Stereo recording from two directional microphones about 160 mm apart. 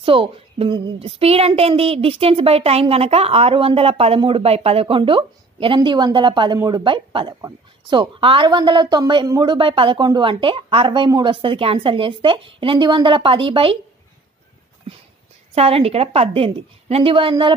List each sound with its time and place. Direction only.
0.0 s speech: 35° right (ahead or behind)
15.5 s speech: 40° right (ahead or behind)